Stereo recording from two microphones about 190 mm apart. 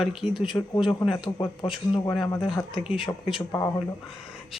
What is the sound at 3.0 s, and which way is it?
Speech, 25° left (ahead or behind).